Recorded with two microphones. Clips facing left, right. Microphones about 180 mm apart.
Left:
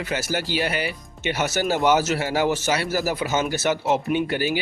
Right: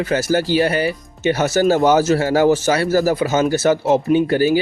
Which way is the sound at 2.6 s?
50° right (ahead or behind).